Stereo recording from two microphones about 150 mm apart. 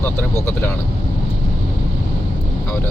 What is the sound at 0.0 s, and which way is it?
Speech, 15° left (ahead or behind).